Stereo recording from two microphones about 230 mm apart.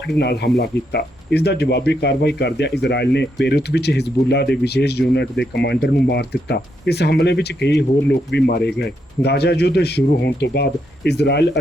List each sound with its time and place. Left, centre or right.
0.2 s speech: left